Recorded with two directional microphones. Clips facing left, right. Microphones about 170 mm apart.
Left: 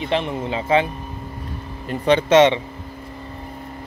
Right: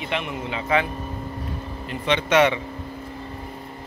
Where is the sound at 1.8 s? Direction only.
40° left (ahead or behind).